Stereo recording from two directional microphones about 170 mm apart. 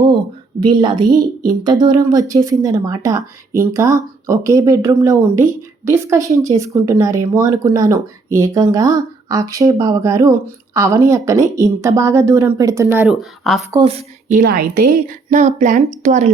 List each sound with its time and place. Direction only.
0.6 s a woman's voice: 25° right (ahead or behind)
13.1 s speech: centre (ahead or behind)
13.8 s a woman's voice: 35° right (ahead or behind)
14.3 s a woman's voice: 55° right (ahead or behind)